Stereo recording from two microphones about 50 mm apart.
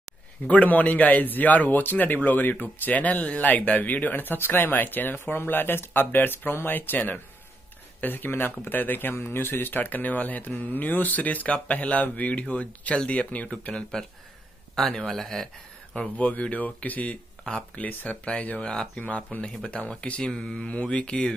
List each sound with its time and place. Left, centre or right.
0.5 s a man's voice: left
14.0 s mantra: centre
15.9 s speech: left
18.6 s mantra: centre
18.9 s speech: left
20.2 s mantra: centre